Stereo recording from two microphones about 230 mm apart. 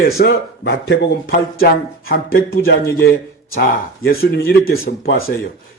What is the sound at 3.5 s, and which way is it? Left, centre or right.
Speech, left.